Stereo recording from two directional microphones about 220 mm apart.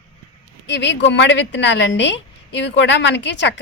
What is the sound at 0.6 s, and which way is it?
Speech, 55° left (ahead or behind).